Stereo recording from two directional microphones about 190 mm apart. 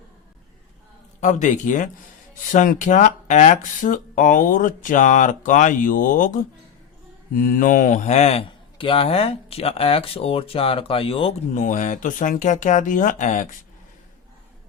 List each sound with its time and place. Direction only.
1.2 s speech: 40° left (ahead or behind)